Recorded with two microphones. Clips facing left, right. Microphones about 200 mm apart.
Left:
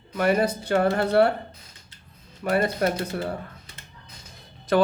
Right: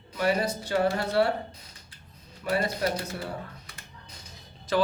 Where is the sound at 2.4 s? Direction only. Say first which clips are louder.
Left 5 dB; 55° left (ahead or behind).